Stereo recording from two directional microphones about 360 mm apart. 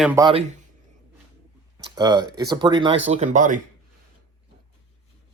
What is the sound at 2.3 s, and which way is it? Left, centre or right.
Speech, centre.